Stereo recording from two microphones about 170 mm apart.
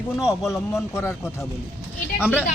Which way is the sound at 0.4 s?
15° left (ahead or behind).